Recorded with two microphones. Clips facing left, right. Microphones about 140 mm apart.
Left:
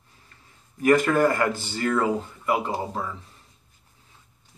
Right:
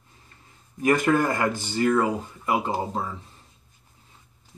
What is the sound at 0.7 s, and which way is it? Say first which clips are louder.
Speech: left 1 dB; 20° right (ahead or behind).